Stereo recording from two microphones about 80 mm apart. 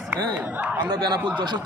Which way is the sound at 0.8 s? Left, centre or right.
Right.